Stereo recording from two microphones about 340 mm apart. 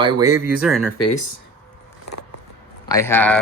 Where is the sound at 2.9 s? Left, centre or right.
Centre.